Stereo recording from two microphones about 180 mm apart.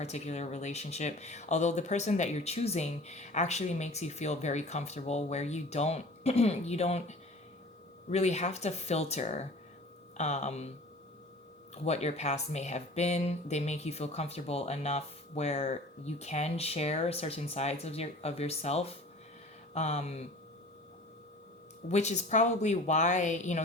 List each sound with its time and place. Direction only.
0.0 s speech: 35° left (ahead or behind)
11.7 s speech: 35° left (ahead or behind)
21.8 s speech: 40° left (ahead or behind)